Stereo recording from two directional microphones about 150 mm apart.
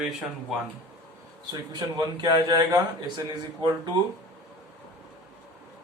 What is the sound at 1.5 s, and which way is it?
A man's voice, 25° right (ahead or behind).